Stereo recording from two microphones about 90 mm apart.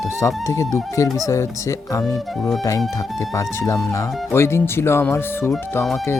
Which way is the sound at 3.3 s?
35° left (ahead or behind).